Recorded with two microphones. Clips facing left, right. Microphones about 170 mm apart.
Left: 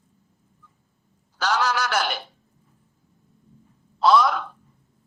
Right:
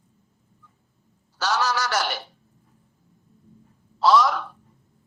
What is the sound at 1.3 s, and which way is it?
Speech, 10° right (ahead or behind).